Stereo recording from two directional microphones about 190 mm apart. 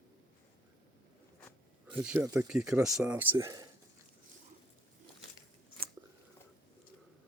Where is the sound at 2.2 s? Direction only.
5° right (ahead or behind).